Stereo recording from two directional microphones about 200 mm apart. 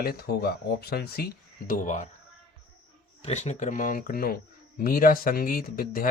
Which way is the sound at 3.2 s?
35° left (ahead or behind).